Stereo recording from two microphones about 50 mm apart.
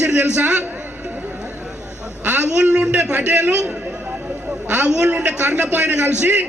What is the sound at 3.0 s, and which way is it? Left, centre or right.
Speech, right.